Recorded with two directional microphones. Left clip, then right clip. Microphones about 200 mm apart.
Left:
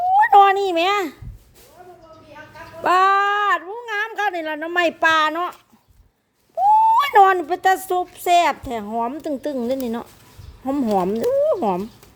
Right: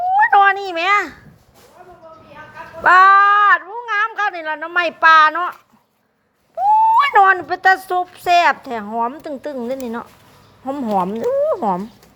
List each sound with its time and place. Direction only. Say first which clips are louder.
0.1 s a sound: even; 30° left (ahead or behind)
2.8 s speech: right 7 dB; 30° left (ahead or behind)
6.9 s speech: right 2 dB; 30° left (ahead or behind)